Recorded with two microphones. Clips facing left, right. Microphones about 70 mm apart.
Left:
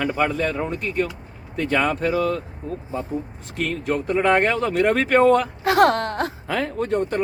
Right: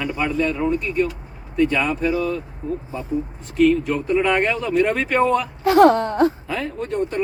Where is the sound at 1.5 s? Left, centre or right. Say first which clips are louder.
Right 2 dB; left.